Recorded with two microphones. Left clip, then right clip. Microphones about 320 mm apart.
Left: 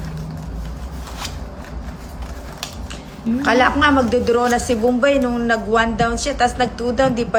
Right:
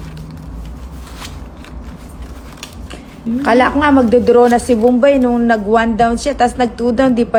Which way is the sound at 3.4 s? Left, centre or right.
Centre.